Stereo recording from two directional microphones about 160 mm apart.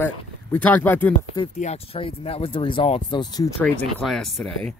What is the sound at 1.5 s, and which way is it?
Speech, 40° left (ahead or behind).